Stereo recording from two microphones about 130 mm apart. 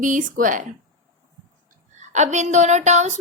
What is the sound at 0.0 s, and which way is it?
Speech, 85° right.